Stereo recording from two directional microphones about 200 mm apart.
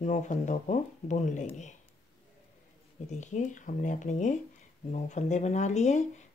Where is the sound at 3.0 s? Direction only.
35° left (ahead or behind).